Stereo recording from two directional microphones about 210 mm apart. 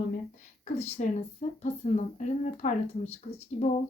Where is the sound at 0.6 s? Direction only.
30° left (ahead or behind).